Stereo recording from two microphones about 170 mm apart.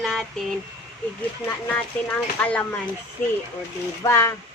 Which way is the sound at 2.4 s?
5° left (ahead or behind).